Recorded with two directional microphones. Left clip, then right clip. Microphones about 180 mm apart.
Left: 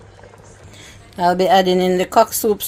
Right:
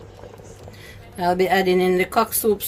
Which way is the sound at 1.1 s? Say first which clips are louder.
Left 5 dB; 30° left (ahead or behind).